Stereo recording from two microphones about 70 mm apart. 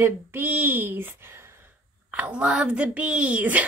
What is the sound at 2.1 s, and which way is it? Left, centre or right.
A woman's voice, centre.